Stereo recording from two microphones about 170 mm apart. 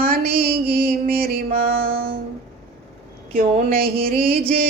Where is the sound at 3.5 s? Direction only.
45° right (ahead or behind).